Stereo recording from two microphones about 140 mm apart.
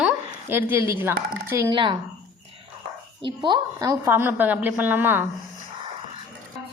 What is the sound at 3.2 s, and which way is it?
A woman's voice, 35° right (ahead or behind).